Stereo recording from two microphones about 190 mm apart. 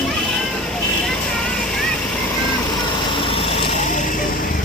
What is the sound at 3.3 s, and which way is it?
Vehicle, 30° left (ahead or behind).